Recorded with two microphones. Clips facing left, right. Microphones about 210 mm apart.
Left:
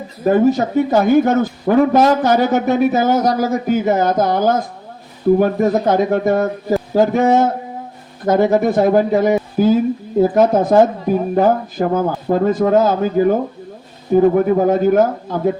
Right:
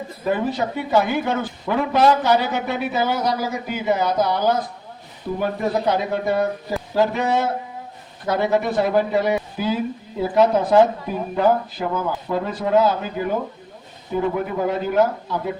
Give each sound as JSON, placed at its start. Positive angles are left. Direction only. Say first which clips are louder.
{"t": 0.3, "sound": "speech", "louder": "left 9 dB", "side_deg": 45}